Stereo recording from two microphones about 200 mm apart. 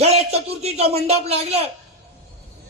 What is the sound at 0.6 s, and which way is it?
A man's voice, 30° right (ahead or behind).